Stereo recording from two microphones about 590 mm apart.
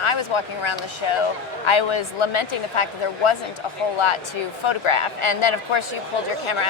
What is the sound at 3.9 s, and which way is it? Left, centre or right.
Speech, left.